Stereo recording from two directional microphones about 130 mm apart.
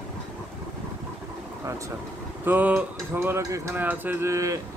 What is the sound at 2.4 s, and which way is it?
Speech, 15° right (ahead or behind).